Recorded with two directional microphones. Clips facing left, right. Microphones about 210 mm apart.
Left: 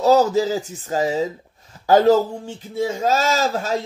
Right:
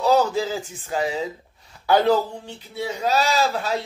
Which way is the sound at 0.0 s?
40° left (ahead or behind).